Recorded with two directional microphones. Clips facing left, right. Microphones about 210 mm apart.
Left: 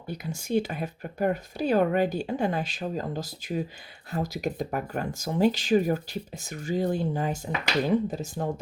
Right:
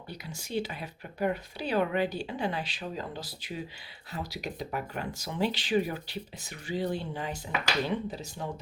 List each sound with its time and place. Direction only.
0.1 s speech: 50° left (ahead or behind)